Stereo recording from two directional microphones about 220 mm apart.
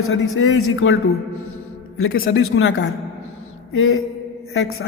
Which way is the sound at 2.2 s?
60° left (ahead or behind).